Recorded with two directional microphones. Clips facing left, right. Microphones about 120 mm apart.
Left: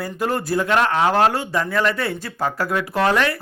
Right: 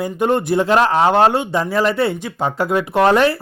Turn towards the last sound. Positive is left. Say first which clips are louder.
# right 5 dB
turn(degrees=-25)  # may be behind; listen again after turning